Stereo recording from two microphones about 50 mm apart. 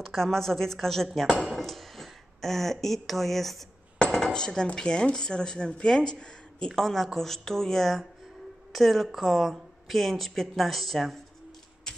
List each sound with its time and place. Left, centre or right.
0.0 s speech: centre
4.0 s cutlery: centre
4.7 s speech: centre
6.7 s speech: centre